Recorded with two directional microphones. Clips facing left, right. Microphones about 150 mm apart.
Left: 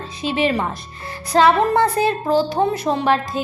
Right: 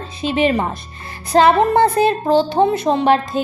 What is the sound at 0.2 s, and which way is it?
A woman's voice, 25° right (ahead or behind).